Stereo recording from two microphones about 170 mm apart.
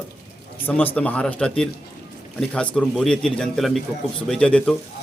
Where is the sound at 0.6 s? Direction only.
10° left (ahead or behind).